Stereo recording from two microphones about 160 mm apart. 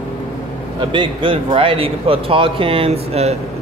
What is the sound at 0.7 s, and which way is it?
A man's voice, 30° right (ahead or behind).